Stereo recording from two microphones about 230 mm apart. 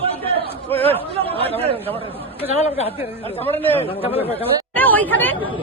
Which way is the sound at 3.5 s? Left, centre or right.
Centre.